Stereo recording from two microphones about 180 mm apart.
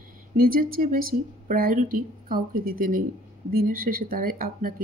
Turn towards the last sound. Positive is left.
turn(degrees=-55)  # may be behind; listen again after turning